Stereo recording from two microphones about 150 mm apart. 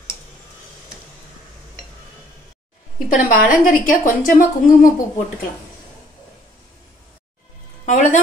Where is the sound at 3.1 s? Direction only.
65° left (ahead or behind).